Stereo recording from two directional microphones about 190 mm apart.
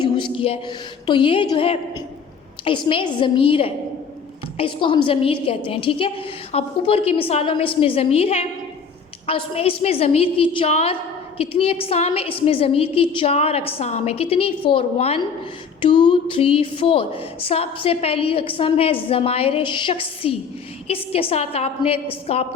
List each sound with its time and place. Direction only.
0.0 s a woman's voice: 25° left (ahead or behind)